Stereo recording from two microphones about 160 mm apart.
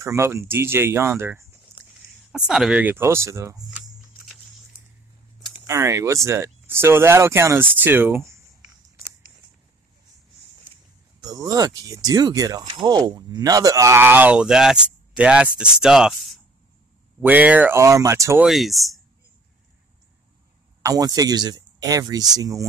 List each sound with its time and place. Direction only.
0.0 s speech: 15° right (ahead or behind)
2.3 s speech: 5° right (ahead or behind); by 3.6 s 20° right (ahead or behind)
5.7 s speech: 20° right (ahead or behind)
11.1 s speech: 25° right (ahead or behind)
18.4 s speech: centre (ahead or behind)
20.8 s speech: 25° right (ahead or behind)